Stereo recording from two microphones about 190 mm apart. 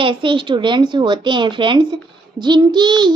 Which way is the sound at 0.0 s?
25° right (ahead or behind).